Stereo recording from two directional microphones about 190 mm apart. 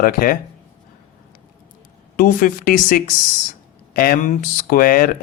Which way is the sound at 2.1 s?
45° left (ahead or behind).